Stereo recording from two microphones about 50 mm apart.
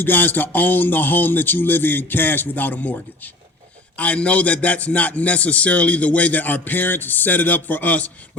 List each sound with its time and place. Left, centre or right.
0.0 s a man's voice: left